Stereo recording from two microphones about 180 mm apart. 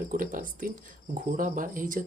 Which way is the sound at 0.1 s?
50° right (ahead or behind).